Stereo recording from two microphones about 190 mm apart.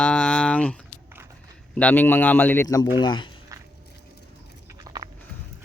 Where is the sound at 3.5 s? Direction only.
15° right (ahead or behind).